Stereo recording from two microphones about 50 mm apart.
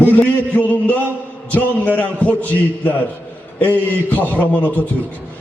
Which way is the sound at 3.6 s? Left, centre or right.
Left.